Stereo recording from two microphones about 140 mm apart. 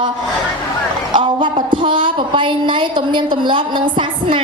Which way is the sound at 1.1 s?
35° right (ahead or behind).